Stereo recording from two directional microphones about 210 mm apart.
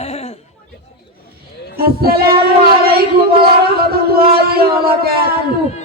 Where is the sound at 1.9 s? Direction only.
45° right (ahead or behind).